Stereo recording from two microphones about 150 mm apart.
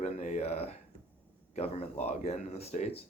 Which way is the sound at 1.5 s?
45° left (ahead or behind).